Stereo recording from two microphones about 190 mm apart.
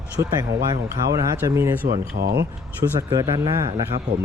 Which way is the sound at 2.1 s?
60° right (ahead or behind).